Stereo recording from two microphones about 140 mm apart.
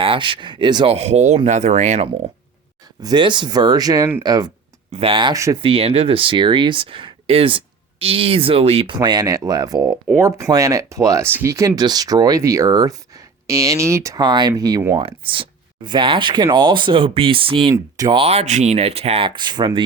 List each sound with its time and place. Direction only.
0.0 s speech: 40° right (ahead or behind)
0.9 s speech: 50° right (ahead or behind)
3.0 s speech: 30° right (ahead or behind)
4.9 s speech: 45° right (ahead or behind)
5.3 s speech: 25° right (ahead or behind)
5.5 s speech: 40° right (ahead or behind)
9.0 s speech: 25° right (ahead or behind)
14.9 s speech: 40° right (ahead or behind)
17.9 s speech: 25° right (ahead or behind)
18.2 s speech: 50° right (ahead or behind)
19.4 s speech: 30° right (ahead or behind)